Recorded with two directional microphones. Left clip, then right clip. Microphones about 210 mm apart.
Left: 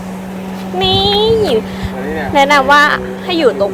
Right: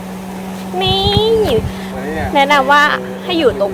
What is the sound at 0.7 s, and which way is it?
A woman's voice, centre (ahead or behind).